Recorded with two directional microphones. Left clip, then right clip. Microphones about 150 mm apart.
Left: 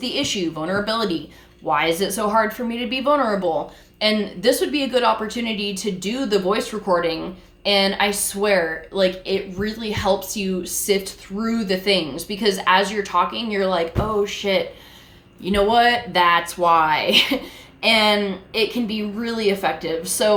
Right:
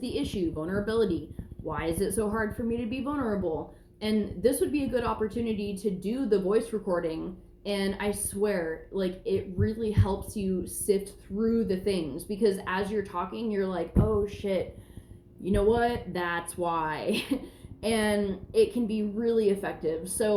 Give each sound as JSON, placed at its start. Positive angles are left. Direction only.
{"t": 0.0, "sound": "a woman's voice", "side_deg": 20}